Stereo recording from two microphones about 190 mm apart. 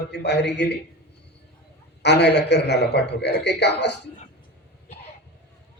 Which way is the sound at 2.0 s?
60° left (ahead or behind).